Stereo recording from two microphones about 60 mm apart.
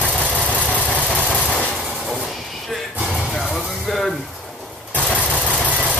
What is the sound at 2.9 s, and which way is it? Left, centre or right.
Music, right.